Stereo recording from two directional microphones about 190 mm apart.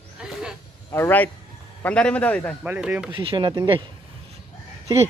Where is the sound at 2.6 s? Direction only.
5° right (ahead or behind).